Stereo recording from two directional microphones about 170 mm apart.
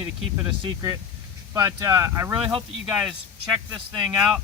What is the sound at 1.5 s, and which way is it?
Speech, 15° right (ahead or behind).